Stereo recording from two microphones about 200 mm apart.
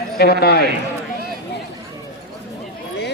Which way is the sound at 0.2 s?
50° left (ahead or behind).